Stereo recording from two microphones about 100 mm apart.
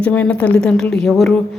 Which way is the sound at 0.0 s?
15° left (ahead or behind).